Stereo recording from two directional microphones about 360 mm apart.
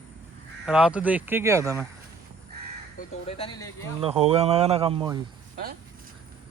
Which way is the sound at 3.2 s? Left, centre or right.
Centre.